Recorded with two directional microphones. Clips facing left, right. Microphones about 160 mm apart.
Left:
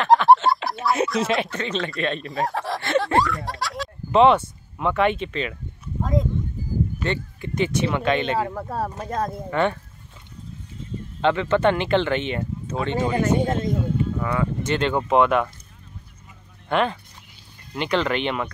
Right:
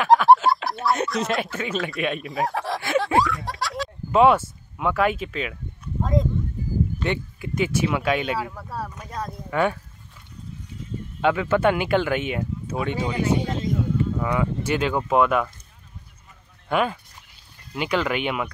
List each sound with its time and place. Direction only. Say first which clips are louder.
0.0 s speech: even; centre (ahead or behind)
8.4 s speech: left 5 dB; 50° left (ahead or behind)
9.5 s speech: right 1 dB; 5° right (ahead or behind)
11.1 s speech: left 1 dB; 5° right (ahead or behind)
13.4 s speech: left 4 dB; 50° left (ahead or behind)
14.1 s speech: even; 15° right (ahead or behind)
16.6 s speech: left 1 dB; 5° right (ahead or behind)